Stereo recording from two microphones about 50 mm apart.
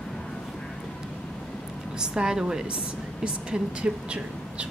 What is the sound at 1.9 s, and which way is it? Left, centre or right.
Speech, centre.